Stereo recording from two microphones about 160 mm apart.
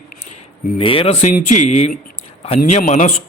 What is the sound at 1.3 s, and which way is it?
Speech, 55° left (ahead or behind).